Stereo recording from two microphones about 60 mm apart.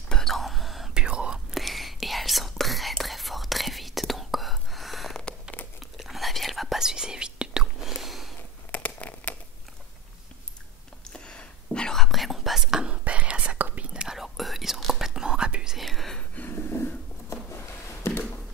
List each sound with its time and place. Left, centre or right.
0.1 s whispering: centre
0.9 s whispering: centre
1.5 s whispering: centre
5.2 s a sound: left
5.9 s whispering: centre
7.8 s a sound: centre
8.7 s a sound: left
11.1 s whispering: centre
12.8 s whispering: right
13.6 s whispering: right
13.9 s whispering: centre
15.8 s whispering: centre
16.3 s a sound: left